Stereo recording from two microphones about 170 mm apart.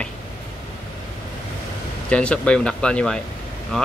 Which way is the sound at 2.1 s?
5° left (ahead or behind).